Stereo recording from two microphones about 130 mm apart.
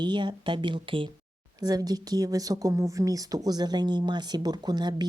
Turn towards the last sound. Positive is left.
turn(degrees=-35)  # may be behind; listen again after turning